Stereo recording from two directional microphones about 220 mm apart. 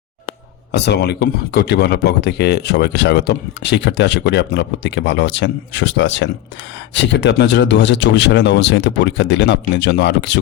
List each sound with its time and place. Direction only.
0.7 s speech: 50° left (ahead or behind)